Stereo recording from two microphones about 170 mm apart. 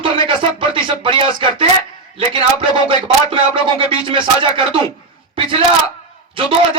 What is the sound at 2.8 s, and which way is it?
Speech, 30° right (ahead or behind).